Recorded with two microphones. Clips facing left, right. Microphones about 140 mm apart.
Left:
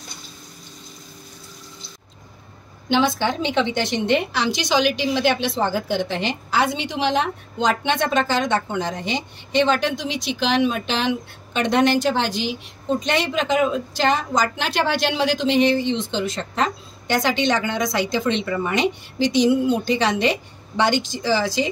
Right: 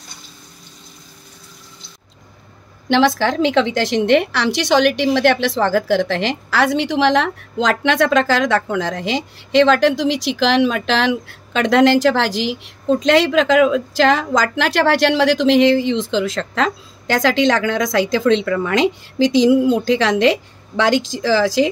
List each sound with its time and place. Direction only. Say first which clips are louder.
3.2 s a woman's voice: right 5 dB; 90° right